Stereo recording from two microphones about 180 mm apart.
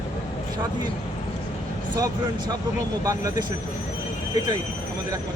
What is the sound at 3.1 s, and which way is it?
Speech, 20° right (ahead or behind).